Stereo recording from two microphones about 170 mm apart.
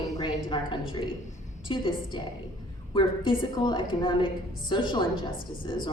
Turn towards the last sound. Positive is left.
turn(degrees=30)  # may be behind; listen again after turning